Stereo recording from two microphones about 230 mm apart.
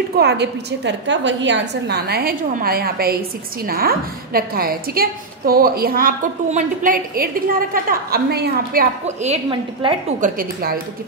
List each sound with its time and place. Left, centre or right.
0.2 s a woman's voice: right
9.0 s a woman's voice: right